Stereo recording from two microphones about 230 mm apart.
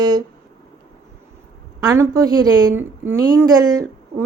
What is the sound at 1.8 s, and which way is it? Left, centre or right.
A woman's voice, centre.